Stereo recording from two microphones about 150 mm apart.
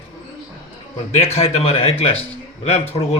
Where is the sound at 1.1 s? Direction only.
45° left (ahead or behind).